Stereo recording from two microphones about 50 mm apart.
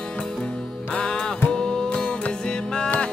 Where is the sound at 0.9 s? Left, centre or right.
Centre.